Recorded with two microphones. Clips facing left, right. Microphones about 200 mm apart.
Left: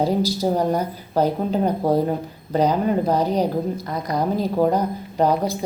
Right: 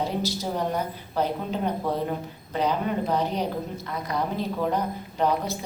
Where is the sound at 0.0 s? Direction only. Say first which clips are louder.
Left 8 dB; 40° left (ahead or behind).